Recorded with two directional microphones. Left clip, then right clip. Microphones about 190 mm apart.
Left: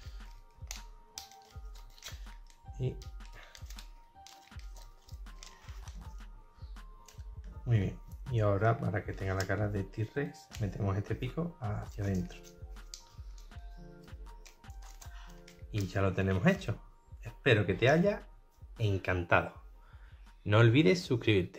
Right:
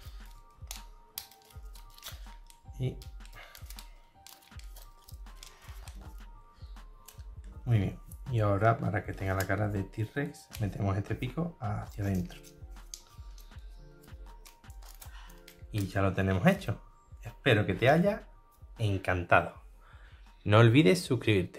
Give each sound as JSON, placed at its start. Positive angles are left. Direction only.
{"t": 0.2, "sound": "music", "side_deg": -5}
{"t": 2.8, "sound": "music", "side_deg": -5}
{"t": 7.6, "sound": "speech", "side_deg": -10}
{"t": 14.0, "sound": "music", "side_deg": 0}
{"t": 15.4, "sound": "speech", "side_deg": -5}
{"t": 20.4, "sound": "speech", "side_deg": -15}